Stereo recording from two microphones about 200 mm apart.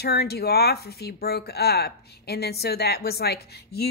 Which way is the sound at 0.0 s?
50° left (ahead or behind).